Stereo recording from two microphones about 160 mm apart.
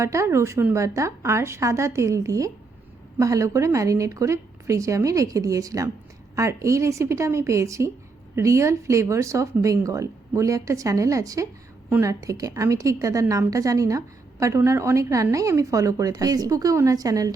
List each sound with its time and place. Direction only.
0.0 s a woman's voice: 20° right (ahead or behind)